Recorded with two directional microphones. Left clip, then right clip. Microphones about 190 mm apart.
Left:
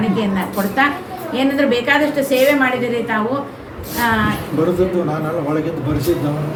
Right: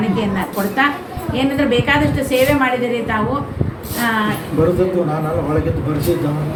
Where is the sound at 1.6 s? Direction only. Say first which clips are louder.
Even; 15° left (ahead or behind).